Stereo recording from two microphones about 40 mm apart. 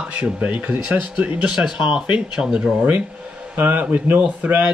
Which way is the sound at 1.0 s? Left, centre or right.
Right.